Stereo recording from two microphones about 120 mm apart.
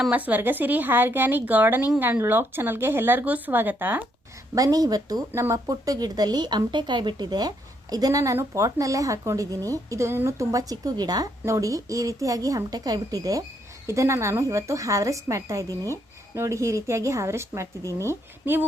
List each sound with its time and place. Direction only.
0.3 s speech: 15° right (ahead or behind)
4.5 s speech: 30° right (ahead or behind)